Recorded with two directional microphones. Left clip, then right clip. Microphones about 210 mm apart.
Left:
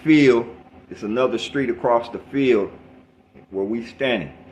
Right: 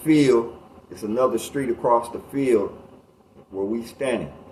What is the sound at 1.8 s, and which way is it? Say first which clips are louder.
Speech: even; 55° left (ahead or behind).